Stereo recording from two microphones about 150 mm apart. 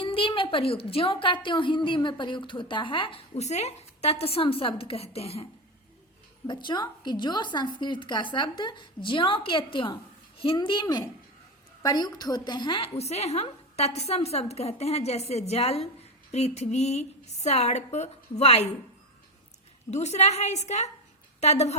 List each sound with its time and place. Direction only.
0.0 s a woman's voice: 35° left (ahead or behind)
6.5 s a woman's voice: 30° left (ahead or behind)
13.0 s a woman's voice: 45° left (ahead or behind)
19.9 s a woman's voice: 50° left (ahead or behind)